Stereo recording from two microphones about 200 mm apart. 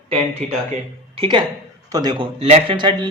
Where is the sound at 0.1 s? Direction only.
30° right (ahead or behind).